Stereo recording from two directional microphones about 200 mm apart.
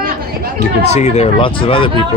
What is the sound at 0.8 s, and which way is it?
Speech, 35° left (ahead or behind).